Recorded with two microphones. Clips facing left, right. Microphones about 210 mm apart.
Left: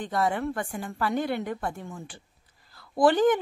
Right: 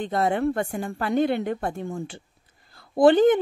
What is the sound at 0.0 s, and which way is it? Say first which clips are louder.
Speech: right 4 dB; 25° right (ahead or behind).